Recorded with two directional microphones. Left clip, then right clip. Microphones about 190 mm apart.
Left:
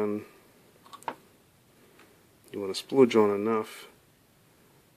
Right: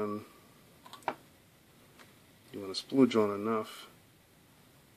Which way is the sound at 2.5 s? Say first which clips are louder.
Left 6 dB; 40° left (ahead or behind).